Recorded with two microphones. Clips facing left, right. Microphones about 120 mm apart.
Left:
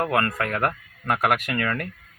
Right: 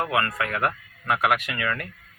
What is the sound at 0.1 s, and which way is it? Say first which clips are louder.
Speech: left 2 dB; 45° left (ahead or behind).